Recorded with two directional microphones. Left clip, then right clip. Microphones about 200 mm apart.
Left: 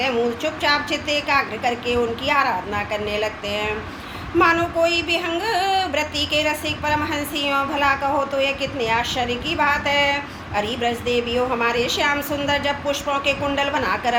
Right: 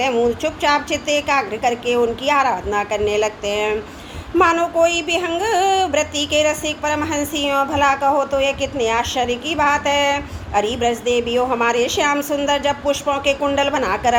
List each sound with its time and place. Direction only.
0.0 s music: 55° right (ahead or behind)